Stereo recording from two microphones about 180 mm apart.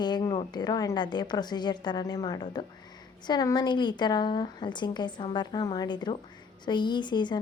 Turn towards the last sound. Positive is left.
turn(degrees=25)  # may be behind; listen again after turning